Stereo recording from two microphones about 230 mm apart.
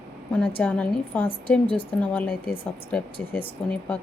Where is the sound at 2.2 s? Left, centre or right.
Left.